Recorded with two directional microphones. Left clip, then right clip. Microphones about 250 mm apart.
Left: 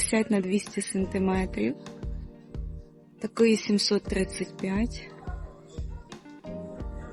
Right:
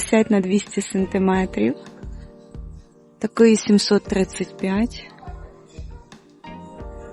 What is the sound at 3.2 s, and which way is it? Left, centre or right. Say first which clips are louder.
Speech: right 8 dB; right.